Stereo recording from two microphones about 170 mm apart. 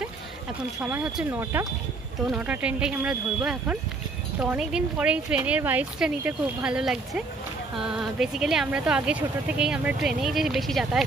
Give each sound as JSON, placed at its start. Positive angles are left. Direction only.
{"t": 0.7, "sound": "speech", "side_deg": -5}